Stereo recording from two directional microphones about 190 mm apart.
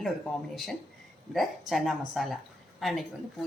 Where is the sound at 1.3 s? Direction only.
Centre (ahead or behind).